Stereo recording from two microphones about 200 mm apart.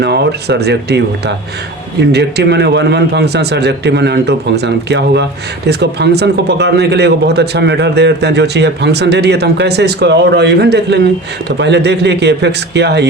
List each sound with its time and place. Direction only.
0.0 s speech: 55° right (ahead or behind)